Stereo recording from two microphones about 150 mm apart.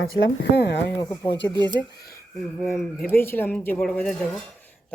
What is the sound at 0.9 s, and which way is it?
Speech, 20° left (ahead or behind).